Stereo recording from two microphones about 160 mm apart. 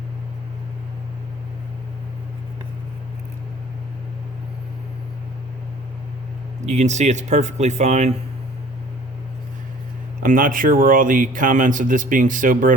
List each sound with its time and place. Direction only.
6.7 s speech: 45° right (ahead or behind)
10.2 s speech: 60° right (ahead or behind)